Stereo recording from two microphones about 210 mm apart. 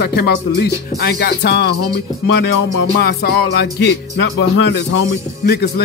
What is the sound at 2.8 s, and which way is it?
Speech, 50° left (ahead or behind).